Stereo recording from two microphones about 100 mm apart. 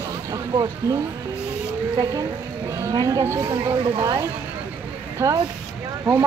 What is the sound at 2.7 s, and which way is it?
Speech, 35° right (ahead or behind).